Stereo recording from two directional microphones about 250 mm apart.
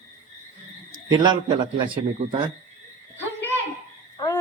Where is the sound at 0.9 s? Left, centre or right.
Centre.